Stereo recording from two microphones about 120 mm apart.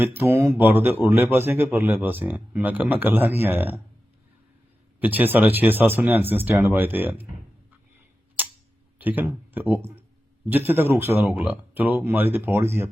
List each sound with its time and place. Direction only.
0.0 s speech: 15° right (ahead or behind)
4.9 s speech: 15° right (ahead or behind)
9.0 s speech: 15° right (ahead or behind)